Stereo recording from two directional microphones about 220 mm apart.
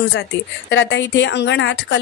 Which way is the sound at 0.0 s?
50° left (ahead or behind).